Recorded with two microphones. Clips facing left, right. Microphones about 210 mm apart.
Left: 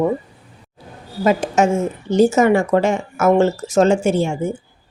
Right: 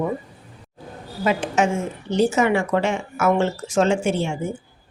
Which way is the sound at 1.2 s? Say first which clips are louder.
Left 5 dB; 40° left (ahead or behind).